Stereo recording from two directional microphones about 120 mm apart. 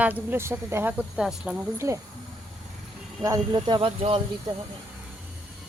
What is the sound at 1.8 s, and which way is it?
Speech, 25° right (ahead or behind).